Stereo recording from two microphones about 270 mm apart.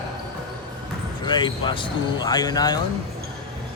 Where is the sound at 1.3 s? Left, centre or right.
Centre.